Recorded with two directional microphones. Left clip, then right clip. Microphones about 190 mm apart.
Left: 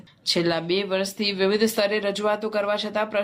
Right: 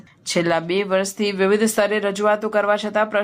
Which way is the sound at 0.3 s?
30° right (ahead or behind).